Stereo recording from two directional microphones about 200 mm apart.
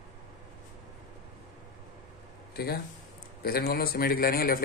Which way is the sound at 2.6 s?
50° left (ahead or behind).